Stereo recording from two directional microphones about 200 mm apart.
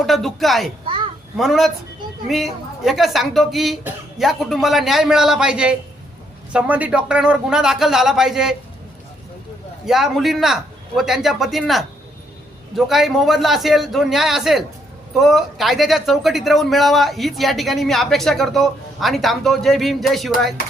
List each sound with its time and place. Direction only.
0.0 s speech: centre (ahead or behind)
0.9 s a sound: 25° right (ahead or behind)
1.4 s speech: centre (ahead or behind)
9.8 s speech: centre (ahead or behind)